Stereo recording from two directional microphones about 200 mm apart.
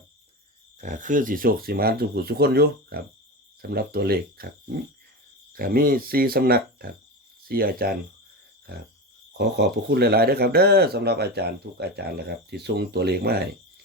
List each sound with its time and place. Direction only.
0.8 s speech: 40° right (ahead or behind)
5.5 s speech: 45° right (ahead or behind)
9.4 s speech: 55° right (ahead or behind)